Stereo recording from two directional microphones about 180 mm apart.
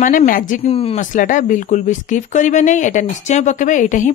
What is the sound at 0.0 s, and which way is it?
Speech, 50° left (ahead or behind).